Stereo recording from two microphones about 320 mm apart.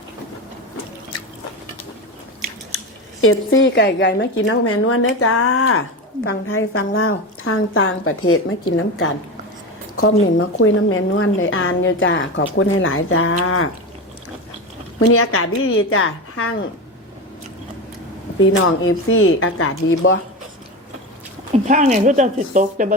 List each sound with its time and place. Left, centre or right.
2.7 s speech: left
10.0 s speech: left
14.9 s speech: left
18.3 s speech: left
21.5 s speech: right